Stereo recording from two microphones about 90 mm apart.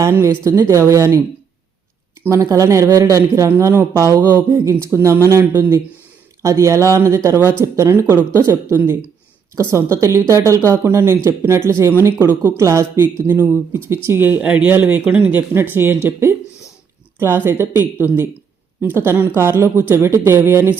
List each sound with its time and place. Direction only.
0.1 s speech: 30° right (ahead or behind)
2.3 s a woman's voice: 35° right (ahead or behind)
17.2 s a woman's voice: 25° right (ahead or behind)
19.4 s a woman's voice: 30° right (ahead or behind)